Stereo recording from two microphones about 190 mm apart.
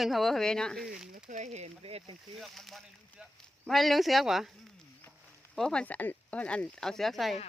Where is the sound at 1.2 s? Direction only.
40° right (ahead or behind).